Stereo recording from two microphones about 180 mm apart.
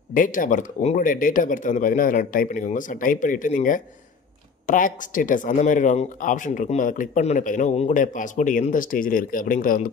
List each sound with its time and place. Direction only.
0.1 s speech: 50° left (ahead or behind)